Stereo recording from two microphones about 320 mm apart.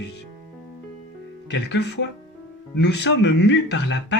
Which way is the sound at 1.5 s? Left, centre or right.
Left.